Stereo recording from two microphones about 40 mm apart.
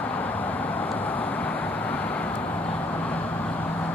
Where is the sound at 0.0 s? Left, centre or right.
Left.